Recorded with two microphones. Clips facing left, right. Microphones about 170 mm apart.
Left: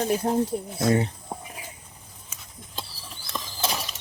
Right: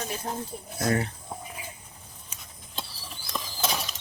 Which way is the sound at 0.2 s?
35° left (ahead or behind).